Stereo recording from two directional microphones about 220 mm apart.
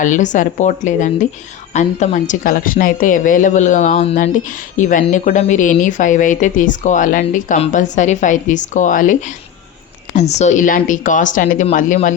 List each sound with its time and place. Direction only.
0.0 s a woman's voice: 35° left (ahead or behind)